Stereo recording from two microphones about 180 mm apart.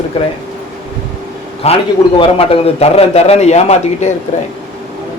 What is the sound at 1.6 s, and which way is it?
Speech, 35° left (ahead or behind).